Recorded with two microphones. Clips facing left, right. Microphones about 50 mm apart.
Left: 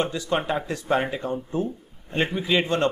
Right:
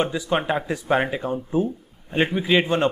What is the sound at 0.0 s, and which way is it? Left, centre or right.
A man's voice, centre.